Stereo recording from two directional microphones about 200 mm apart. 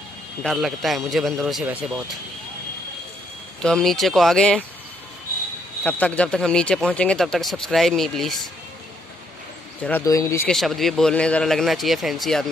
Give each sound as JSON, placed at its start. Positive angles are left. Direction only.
{"t": 0.4, "sound": "speech", "side_deg": 0}
{"t": 3.6, "sound": "speech", "side_deg": 0}
{"t": 5.9, "sound": "speech", "side_deg": 5}
{"t": 9.8, "sound": "speech", "side_deg": 10}
{"t": 10.5, "sound": "speech", "side_deg": 0}